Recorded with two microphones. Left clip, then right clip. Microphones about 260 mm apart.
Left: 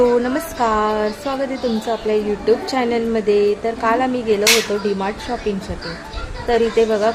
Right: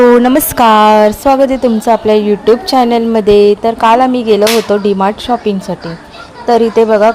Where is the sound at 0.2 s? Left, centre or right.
Right.